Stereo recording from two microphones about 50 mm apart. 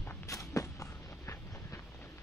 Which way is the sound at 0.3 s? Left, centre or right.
Left.